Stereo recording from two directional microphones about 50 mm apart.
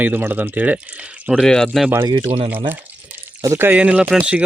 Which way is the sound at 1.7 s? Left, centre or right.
Centre.